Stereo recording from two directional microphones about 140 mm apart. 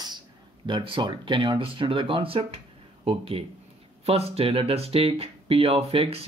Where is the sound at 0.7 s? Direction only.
35° right (ahead or behind).